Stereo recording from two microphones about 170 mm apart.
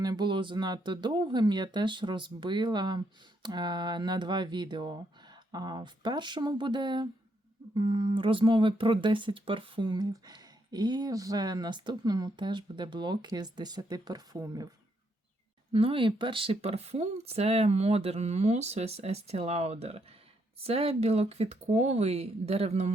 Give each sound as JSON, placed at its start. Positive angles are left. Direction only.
{"t": 0.0, "sound": "speech", "side_deg": -25}
{"t": 15.7, "sound": "speech", "side_deg": -35}